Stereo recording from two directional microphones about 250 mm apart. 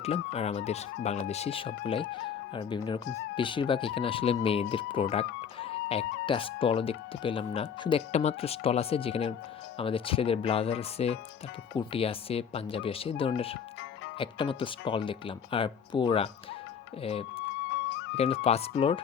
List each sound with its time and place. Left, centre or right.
0.0 s speech: left
18.4 s speech: left